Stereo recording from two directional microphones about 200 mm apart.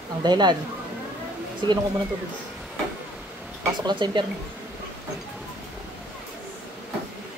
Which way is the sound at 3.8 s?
20° right (ahead or behind).